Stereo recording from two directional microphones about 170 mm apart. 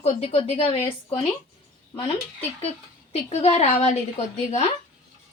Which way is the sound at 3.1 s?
40° left (ahead or behind).